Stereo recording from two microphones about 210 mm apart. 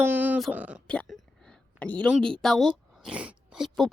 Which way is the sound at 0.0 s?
10° right (ahead or behind).